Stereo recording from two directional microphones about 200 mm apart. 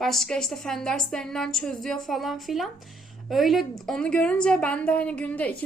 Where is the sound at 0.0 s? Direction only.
Centre (ahead or behind).